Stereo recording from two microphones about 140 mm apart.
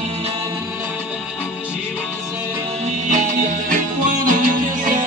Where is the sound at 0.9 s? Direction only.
10° right (ahead or behind).